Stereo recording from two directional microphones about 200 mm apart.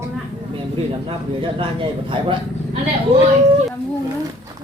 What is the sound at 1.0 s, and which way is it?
A man's voice, 25° right (ahead or behind).